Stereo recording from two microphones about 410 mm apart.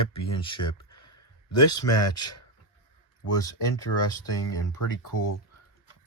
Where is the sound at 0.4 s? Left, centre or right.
Centre.